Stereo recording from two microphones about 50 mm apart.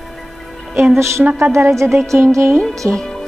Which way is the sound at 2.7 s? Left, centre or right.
Right.